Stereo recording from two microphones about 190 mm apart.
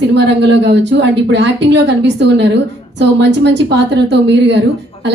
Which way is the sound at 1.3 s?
65° right (ahead or behind).